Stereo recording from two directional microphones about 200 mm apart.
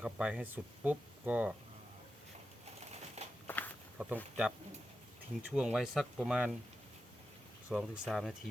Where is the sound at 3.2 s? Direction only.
35° right (ahead or behind).